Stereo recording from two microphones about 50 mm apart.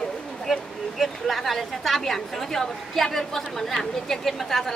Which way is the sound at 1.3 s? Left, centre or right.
Centre.